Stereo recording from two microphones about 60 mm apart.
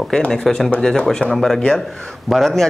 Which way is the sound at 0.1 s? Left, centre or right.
Centre.